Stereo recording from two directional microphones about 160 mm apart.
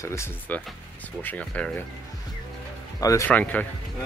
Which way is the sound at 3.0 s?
20° left (ahead or behind).